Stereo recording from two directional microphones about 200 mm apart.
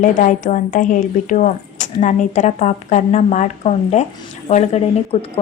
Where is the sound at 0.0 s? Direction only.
40° left (ahead or behind).